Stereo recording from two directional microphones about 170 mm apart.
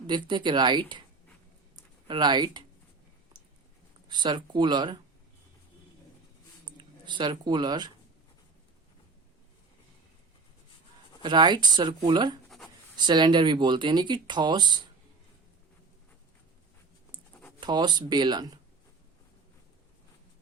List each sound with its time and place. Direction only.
0.1 s speech: 25° right (ahead or behind)
1.7 s a sound: 25° right (ahead or behind)
4.1 s speech: 25° right (ahead or behind)
6.7 s speech: 25° right (ahead or behind)
11.2 s speech: 25° right (ahead or behind)
17.6 s speech: 25° right (ahead or behind)